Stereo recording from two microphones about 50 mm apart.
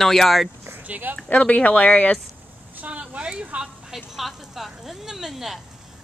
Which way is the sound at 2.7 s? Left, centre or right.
Right.